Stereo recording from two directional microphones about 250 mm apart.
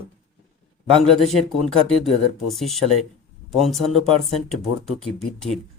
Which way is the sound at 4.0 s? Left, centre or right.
Right.